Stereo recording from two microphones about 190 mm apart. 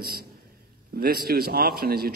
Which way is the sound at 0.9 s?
55° right (ahead or behind).